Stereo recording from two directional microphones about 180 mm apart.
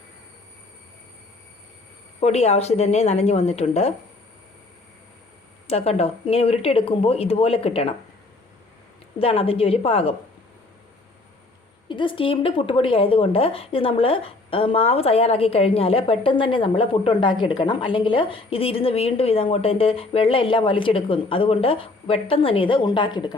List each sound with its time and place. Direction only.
2.2 s speech: 35° left (ahead or behind)
5.6 s speech: 35° left (ahead or behind)
9.1 s speech: 30° left (ahead or behind)
11.9 s a woman's voice: 30° left (ahead or behind)